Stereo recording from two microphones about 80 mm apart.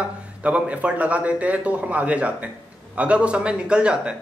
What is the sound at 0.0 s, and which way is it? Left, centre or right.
Speech, centre.